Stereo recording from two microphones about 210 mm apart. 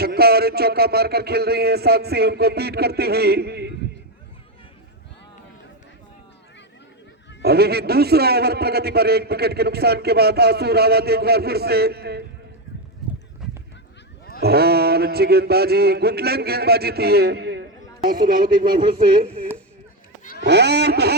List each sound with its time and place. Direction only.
0.0 s a man's voice: 50° right (ahead or behind)
7.4 s a man's voice: 50° right (ahead or behind)
13.0 s horse: centre (ahead or behind)
13.4 s goose: centre (ahead or behind)
14.4 s a man's voice: 50° right (ahead or behind)
20.4 s a man's voice: 50° right (ahead or behind)